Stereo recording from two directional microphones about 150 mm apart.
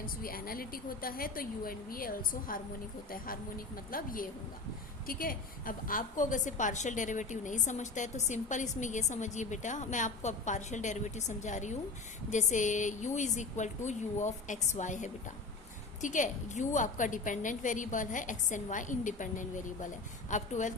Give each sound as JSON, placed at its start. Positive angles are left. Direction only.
{"t": 0.0, "sound": "a woman's voice", "side_deg": 75}
{"t": 3.9, "sound": "a woman's voice", "side_deg": 70}